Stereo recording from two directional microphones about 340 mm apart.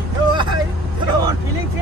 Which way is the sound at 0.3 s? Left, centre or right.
Centre.